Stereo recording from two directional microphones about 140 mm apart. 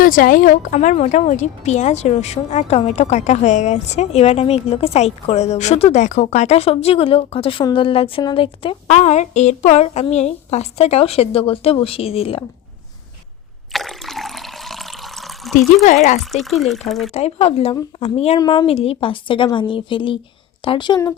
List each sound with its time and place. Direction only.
0.0 s a woman's voice: 80° left; by 9.0 s 40° left (ahead or behind)
9.0 s speech: 55° left (ahead or behind)
13.7 s water: centre (ahead or behind)
16.3 s speech: centre (ahead or behind)
17.2 s a woman's voice: 50° left (ahead or behind); by 21.0 s 35° left (ahead or behind)